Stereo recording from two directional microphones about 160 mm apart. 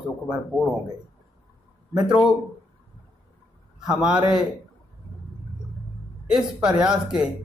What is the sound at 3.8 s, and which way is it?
Speech, 5° right (ahead or behind).